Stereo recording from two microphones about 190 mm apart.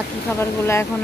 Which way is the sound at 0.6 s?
15° left (ahead or behind).